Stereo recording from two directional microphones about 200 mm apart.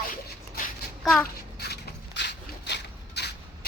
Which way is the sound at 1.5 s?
55° left (ahead or behind).